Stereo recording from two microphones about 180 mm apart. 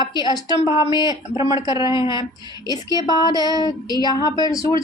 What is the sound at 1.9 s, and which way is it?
Speech, 25° left (ahead or behind).